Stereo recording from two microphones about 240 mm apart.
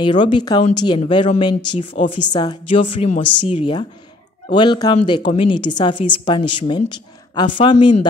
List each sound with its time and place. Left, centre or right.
0.0 s a woman's voice: centre